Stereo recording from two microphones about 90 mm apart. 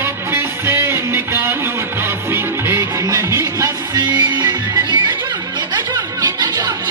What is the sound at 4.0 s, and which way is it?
Music, 50° right (ahead or behind).